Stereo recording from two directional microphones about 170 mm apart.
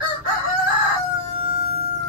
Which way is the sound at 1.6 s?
35° right (ahead or behind).